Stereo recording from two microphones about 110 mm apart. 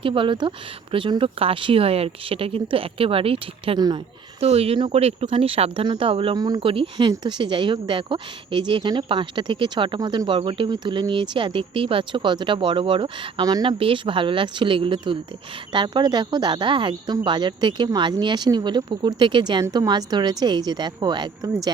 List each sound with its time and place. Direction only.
0.0 s speech: 50° right (ahead or behind)
3.8 s speech: 35° right (ahead or behind)
4.4 s speech: 65° right (ahead or behind)
6.3 s speech: 40° right (ahead or behind)
6.6 s a woman's voice: 55° right (ahead or behind); by 13.7 s 40° right (ahead or behind)
13.7 s a woman's voice: 55° right (ahead or behind); by 21.7 s 40° right (ahead or behind)